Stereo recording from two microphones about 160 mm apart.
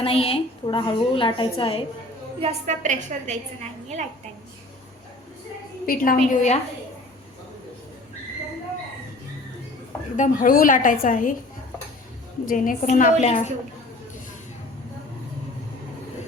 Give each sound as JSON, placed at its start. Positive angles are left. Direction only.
{"t": 0.0, "sound": "a woman's voice", "side_deg": 35}
{"t": 2.4, "sound": "a woman's voice", "side_deg": -45}
{"t": 5.8, "sound": "a woman's voice", "side_deg": 60}
{"t": 6.3, "sound": "a woman's voice", "side_deg": 45}
{"t": 10.2, "sound": "a woman's voice", "side_deg": 55}
{"t": 12.5, "sound": "a woman's voice", "side_deg": 50}